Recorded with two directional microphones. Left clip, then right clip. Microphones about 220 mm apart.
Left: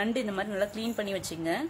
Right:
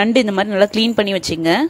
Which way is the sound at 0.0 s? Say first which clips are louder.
Right 15 dB; 35° right (ahead or behind).